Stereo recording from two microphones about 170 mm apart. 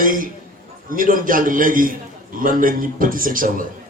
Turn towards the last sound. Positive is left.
turn(degrees=-55)  # may be behind; listen again after turning